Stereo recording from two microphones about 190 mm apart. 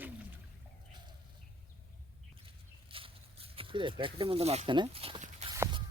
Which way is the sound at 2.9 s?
30° right (ahead or behind).